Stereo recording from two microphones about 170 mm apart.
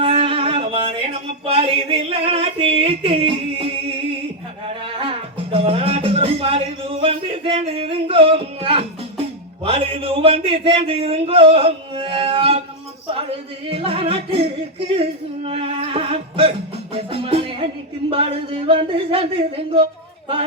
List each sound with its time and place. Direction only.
0.0 s a sound: 35° right (ahead or behind)
1.5 s music: 35° right (ahead or behind)
13.7 s music: 35° right (ahead or behind)